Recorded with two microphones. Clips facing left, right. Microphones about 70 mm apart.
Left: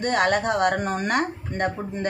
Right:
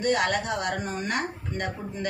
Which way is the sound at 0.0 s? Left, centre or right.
Left.